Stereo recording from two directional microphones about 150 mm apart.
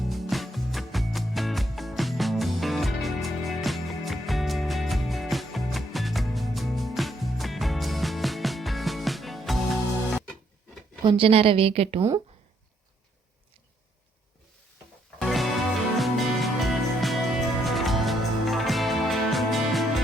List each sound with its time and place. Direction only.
0.0 s music: centre (ahead or behind)
11.0 s a woman's voice: 35° right (ahead or behind)
15.2 s music: centre (ahead or behind)